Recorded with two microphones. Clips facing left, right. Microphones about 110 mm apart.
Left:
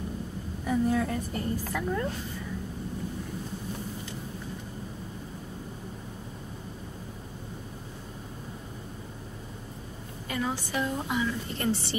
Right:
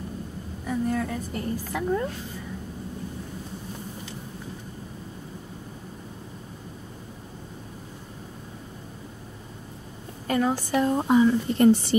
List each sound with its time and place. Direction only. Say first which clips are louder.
0.7 s a woman's voice: left 1 dB; 5° left (ahead or behind); by 2.0 s 15° right (ahead or behind)
10.2 s a woman's voice: right 7 dB; 50° right (ahead or behind)